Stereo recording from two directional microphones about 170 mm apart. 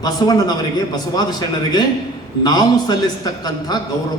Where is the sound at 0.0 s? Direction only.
25° left (ahead or behind).